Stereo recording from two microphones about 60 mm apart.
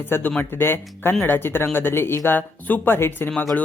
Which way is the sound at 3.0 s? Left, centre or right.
Left.